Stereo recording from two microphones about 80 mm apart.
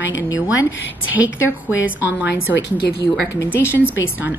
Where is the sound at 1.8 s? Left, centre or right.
Centre.